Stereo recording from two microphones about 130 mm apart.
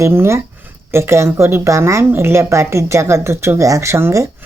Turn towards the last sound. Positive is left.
turn(degrees=-20)  # may be behind; listen again after turning